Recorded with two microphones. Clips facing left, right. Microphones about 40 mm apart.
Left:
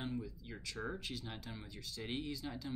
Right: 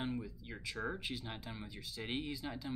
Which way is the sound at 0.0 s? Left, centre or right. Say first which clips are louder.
Right 2 dB; right.